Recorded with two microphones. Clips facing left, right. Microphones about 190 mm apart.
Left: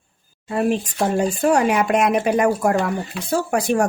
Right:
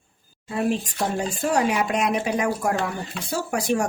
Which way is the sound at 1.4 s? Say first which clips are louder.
Left 3 dB; 55° left (ahead or behind).